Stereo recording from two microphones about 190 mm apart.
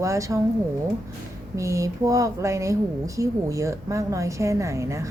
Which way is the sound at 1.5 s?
15° right (ahead or behind).